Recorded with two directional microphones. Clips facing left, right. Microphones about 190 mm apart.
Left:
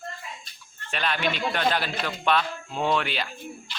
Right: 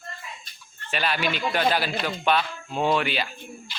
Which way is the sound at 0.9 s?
5° right (ahead or behind).